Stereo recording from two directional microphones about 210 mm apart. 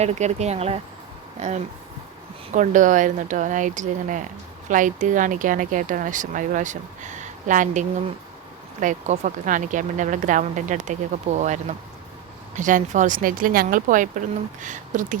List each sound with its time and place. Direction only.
0.0 s speech: 30° right (ahead or behind)